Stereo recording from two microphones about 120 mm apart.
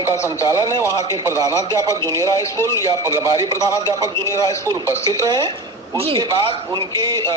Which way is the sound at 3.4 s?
30° right (ahead or behind).